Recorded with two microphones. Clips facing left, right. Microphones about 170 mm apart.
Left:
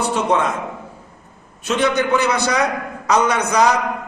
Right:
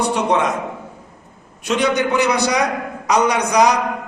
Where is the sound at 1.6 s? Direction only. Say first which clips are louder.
Even; 15° right (ahead or behind).